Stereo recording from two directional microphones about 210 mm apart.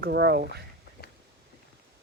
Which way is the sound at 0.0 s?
50° right (ahead or behind).